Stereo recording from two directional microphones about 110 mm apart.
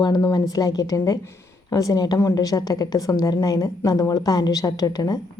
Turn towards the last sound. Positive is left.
turn(degrees=35)  # may be behind; listen again after turning